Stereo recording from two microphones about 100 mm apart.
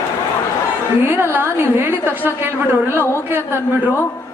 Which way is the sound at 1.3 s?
25° right (ahead or behind).